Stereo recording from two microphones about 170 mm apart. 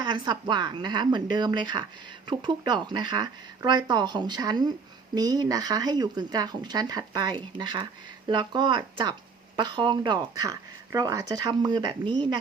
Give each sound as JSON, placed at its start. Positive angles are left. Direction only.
{"t": 0.0, "sound": "speech", "side_deg": -25}